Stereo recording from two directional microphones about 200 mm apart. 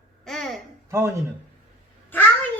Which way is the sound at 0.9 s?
15° right (ahead or behind).